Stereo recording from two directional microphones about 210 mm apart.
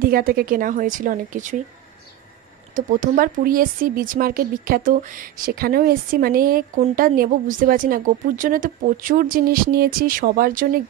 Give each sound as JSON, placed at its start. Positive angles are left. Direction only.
{"t": 0.0, "sound": "a woman's voice", "side_deg": -45}
{"t": 2.7, "sound": "speech", "side_deg": -40}